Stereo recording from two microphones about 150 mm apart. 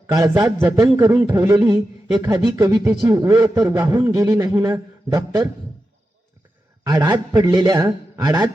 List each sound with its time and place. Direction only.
0.1 s a man's voice: 20° right (ahead or behind)
6.8 s a man's voice: 25° right (ahead or behind)